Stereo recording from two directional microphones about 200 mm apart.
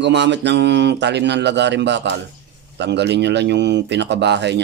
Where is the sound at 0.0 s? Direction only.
60° right (ahead or behind).